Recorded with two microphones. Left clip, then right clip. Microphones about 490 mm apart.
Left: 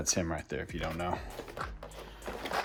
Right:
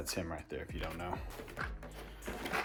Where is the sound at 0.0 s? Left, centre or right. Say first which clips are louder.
Left 7 dB; centre.